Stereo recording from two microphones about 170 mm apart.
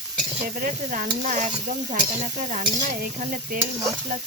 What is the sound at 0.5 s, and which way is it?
Speech, 50° right (ahead or behind).